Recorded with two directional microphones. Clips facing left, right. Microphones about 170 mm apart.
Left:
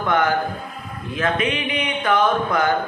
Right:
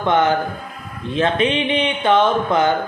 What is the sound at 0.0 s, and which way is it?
Speech, 25° right (ahead or behind).